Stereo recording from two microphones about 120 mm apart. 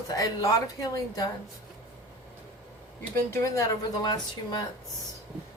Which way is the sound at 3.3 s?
25° left (ahead or behind).